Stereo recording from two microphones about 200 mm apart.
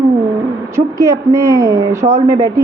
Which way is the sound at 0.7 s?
15° right (ahead or behind).